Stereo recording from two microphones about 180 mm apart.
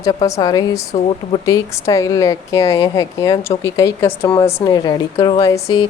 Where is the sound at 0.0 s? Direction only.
20° left (ahead or behind).